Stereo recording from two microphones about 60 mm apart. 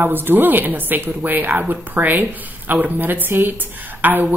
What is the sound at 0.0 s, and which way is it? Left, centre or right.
A woman's voice, right.